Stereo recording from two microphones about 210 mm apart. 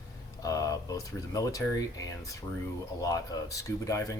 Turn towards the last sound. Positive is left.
turn(degrees=15)  # may be behind; listen again after turning